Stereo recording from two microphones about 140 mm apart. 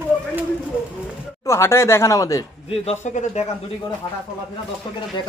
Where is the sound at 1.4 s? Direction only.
20° left (ahead or behind).